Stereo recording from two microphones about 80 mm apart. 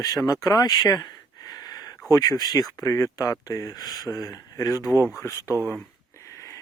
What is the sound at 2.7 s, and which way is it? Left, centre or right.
Speech, left.